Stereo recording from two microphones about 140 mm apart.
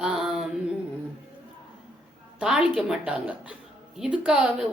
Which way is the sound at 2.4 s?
5° right (ahead or behind).